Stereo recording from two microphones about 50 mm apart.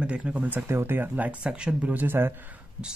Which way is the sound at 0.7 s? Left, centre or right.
Right.